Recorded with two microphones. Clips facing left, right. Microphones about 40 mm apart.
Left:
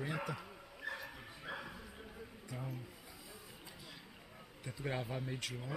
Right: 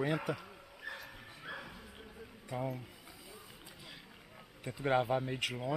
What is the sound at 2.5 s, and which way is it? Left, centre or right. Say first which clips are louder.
Speech: right 8 dB; right.